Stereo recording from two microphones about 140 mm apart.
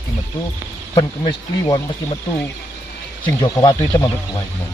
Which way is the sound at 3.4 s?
30° left (ahead or behind).